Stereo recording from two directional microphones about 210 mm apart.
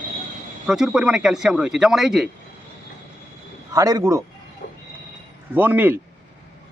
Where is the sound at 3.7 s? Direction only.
15° right (ahead or behind).